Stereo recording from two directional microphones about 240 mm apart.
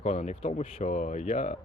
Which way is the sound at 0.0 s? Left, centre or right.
Left.